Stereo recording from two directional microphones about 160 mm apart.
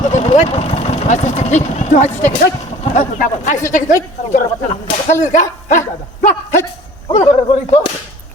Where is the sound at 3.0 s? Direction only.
50° left (ahead or behind).